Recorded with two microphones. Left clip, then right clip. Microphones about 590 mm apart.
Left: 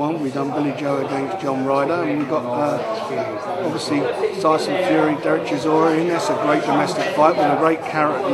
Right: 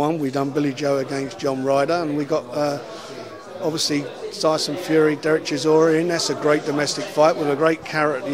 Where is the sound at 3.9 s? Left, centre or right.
Right.